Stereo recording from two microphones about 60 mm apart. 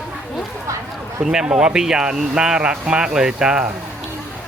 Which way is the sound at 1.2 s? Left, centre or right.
Centre.